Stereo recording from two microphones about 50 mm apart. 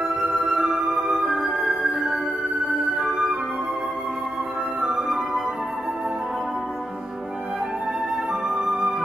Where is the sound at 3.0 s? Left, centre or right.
Centre.